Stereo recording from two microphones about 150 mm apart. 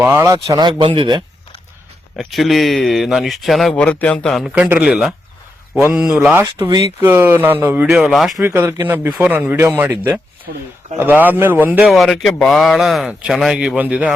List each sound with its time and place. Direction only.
0.0 s speech: 15° right (ahead or behind); by 1.2 s 35° right (ahead or behind)
2.1 s speech: centre (ahead or behind)
6.8 s speech: 15° right (ahead or behind)
8.4 s speech: 15° right (ahead or behind)
11.9 s speech: centre (ahead or behind)